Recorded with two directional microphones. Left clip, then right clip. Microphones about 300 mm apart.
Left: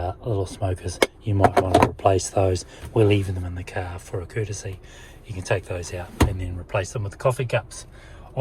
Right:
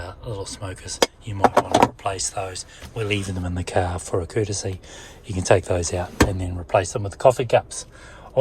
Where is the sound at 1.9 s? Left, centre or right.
Centre.